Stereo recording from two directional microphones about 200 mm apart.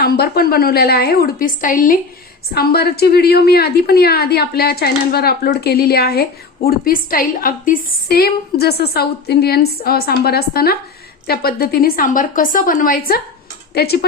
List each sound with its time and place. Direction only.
0.0 s a woman's voice: 50° left (ahead or behind)